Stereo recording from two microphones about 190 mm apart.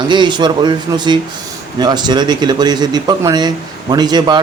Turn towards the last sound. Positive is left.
turn(degrees=-20)  # may be behind; listen again after turning